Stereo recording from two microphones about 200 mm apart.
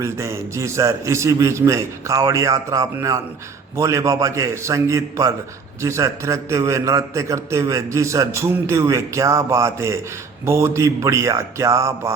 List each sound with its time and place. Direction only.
0.0 s a man's voice: 15° right (ahead or behind)